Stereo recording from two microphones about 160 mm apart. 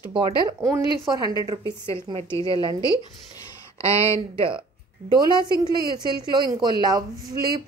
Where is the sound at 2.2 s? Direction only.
20° left (ahead or behind).